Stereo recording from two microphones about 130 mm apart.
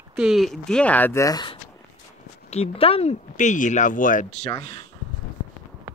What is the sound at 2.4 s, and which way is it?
Speech, 50° left (ahead or behind).